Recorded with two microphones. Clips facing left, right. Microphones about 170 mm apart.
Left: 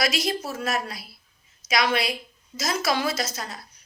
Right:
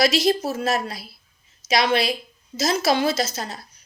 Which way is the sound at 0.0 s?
25° right (ahead or behind).